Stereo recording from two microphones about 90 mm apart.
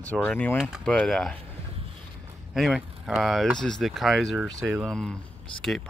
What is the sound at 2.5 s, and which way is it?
Speech, 5° right (ahead or behind).